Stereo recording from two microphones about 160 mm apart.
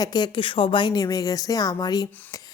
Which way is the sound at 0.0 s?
25° left (ahead or behind).